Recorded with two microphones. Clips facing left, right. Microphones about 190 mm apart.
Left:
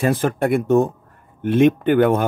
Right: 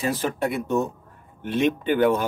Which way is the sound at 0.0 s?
50° left (ahead or behind).